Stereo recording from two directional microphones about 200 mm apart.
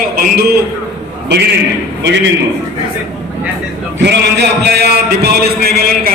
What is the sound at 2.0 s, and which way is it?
Speech, 60° right (ahead or behind).